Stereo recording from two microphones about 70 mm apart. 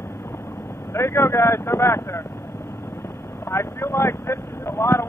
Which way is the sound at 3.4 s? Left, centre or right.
Left.